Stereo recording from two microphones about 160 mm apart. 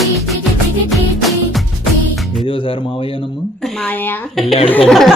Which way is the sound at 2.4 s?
35° left (ahead or behind).